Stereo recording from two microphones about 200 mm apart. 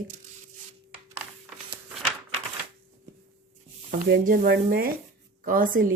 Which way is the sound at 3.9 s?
40° right (ahead or behind).